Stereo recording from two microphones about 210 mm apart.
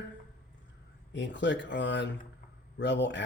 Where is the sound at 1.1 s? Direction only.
55° left (ahead or behind).